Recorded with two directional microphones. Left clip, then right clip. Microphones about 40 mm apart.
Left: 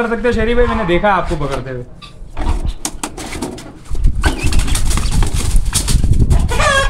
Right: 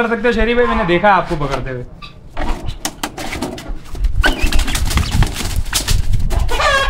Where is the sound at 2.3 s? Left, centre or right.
Centre.